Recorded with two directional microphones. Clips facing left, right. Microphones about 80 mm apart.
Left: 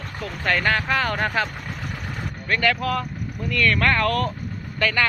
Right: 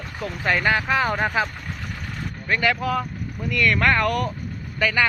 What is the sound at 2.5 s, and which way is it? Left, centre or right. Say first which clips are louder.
Speech: even; centre.